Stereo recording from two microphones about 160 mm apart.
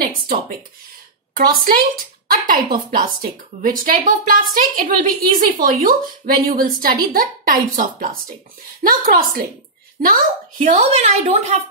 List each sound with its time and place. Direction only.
1.3 s a woman's voice: 65° right (ahead or behind); by 11.6 s 45° right (ahead or behind)